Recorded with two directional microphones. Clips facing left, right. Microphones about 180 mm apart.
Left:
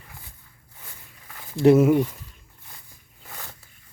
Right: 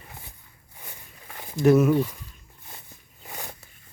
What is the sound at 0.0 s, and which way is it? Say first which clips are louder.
Walk: right 2 dB; 25° right (ahead or behind).